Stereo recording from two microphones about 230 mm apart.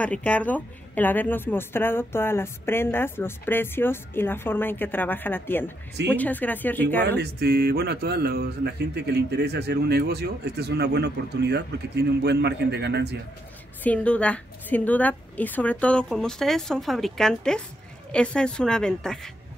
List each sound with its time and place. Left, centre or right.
0.0 s a woman's voice: centre
7.1 s speech: right
13.8 s a woman's voice: centre